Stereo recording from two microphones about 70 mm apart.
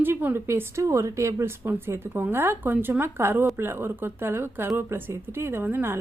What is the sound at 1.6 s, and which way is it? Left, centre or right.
A woman's voice, right.